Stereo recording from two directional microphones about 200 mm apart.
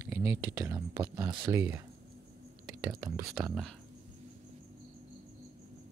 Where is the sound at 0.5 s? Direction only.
15° right (ahead or behind).